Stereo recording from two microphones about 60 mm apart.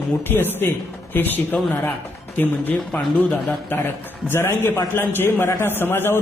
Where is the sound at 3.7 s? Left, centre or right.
Left.